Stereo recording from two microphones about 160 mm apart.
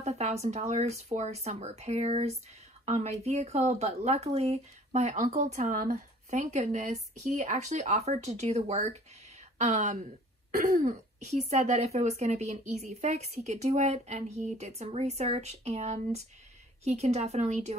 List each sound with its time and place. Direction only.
0.0 s speech: 40° right (ahead or behind)